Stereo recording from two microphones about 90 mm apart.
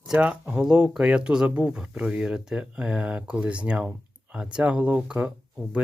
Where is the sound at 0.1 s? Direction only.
15° right (ahead or behind).